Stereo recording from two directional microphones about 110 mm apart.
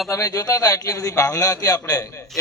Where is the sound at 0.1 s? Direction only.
35° left (ahead or behind).